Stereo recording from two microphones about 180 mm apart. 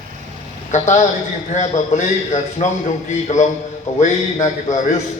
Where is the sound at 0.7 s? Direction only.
40° left (ahead or behind).